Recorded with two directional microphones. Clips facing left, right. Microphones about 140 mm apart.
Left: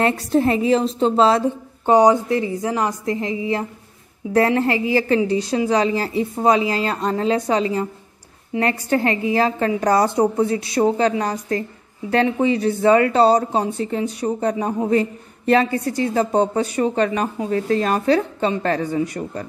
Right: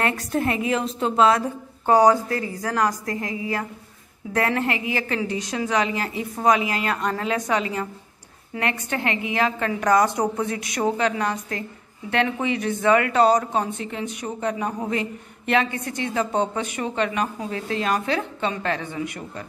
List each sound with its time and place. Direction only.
0.0 s a woman's voice: 30° left (ahead or behind)